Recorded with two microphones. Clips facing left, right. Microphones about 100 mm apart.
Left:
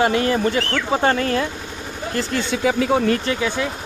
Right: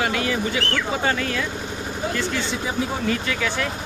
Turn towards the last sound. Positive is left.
turn(degrees=20)  # may be behind; listen again after turning